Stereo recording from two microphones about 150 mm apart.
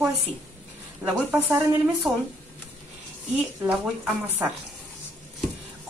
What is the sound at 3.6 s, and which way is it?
Speech, 5° right (ahead or behind).